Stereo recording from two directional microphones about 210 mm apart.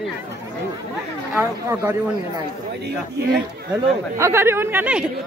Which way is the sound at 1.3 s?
15° right (ahead or behind).